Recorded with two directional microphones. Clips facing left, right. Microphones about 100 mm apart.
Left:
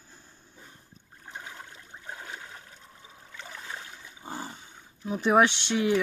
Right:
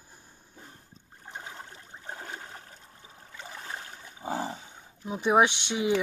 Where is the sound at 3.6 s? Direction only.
40° right (ahead or behind).